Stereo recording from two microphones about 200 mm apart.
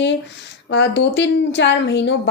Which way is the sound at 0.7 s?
60° left (ahead or behind).